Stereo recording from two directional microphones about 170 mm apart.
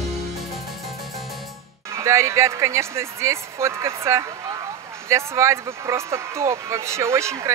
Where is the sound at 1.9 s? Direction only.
15° right (ahead or behind).